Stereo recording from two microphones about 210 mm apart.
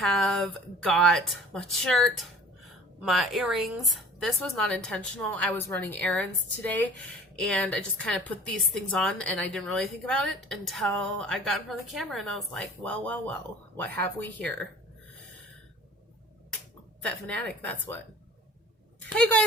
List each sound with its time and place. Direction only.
0.0 s speech: centre (ahead or behind)
17.0 s speech: 5° left (ahead or behind)
19.1 s speech: 5° left (ahead or behind)